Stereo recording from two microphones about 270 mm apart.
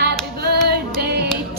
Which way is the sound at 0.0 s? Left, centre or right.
Right.